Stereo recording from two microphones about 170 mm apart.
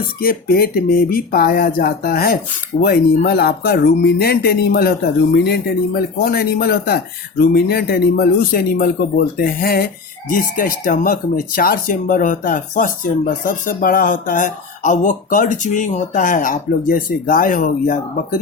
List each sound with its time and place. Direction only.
0.2 s speech: 60° left (ahead or behind)